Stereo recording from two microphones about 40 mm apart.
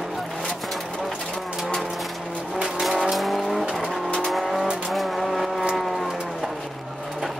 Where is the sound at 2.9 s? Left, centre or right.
Centre.